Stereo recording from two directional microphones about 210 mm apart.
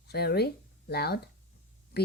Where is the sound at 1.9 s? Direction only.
50° left (ahead or behind).